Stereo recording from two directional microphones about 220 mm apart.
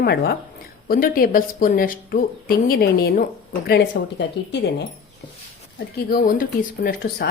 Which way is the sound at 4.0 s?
55° left (ahead or behind).